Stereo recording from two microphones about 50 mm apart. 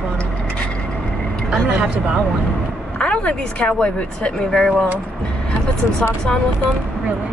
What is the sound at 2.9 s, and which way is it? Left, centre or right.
A woman's voice, left.